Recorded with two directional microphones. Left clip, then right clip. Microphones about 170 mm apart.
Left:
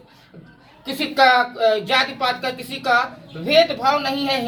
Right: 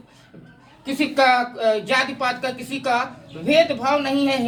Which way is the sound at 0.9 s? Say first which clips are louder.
Left 2 dB; 15° right (ahead or behind).